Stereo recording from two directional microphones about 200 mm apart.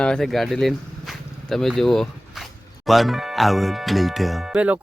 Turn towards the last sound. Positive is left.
turn(degrees=-5)  # may be behind; listen again after turning